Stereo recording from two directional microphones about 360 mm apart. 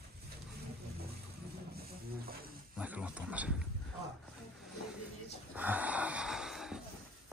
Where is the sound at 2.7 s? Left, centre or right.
Centre.